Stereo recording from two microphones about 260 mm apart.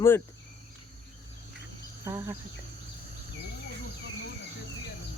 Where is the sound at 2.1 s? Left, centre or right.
Centre.